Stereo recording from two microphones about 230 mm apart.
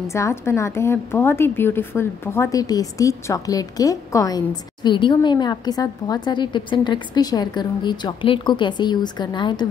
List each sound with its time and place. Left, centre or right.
0.1 s a woman's voice: centre